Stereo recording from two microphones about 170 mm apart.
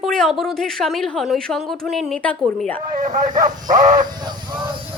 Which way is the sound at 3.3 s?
25° right (ahead or behind).